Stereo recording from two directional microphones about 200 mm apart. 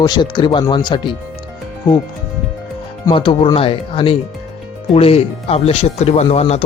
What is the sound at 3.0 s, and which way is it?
Speech, 25° left (ahead or behind).